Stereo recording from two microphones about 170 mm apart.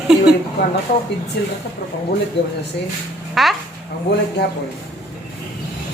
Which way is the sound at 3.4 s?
Centre (ahead or behind).